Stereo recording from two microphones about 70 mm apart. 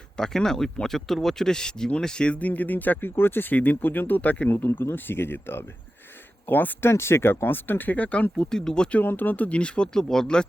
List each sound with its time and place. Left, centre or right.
0.2 s speech: centre; by 6.9 s left
6.9 s speech: left
8.4 s speech: centre
9.0 s speech: left; by 10.4 s centre